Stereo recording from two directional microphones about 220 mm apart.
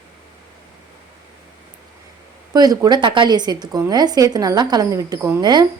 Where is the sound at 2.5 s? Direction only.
15° right (ahead or behind).